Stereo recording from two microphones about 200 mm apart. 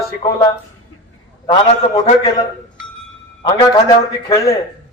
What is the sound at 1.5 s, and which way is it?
Speech, 25° left (ahead or behind).